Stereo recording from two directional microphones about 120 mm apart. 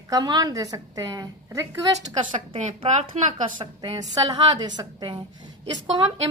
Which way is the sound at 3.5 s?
35° right (ahead or behind).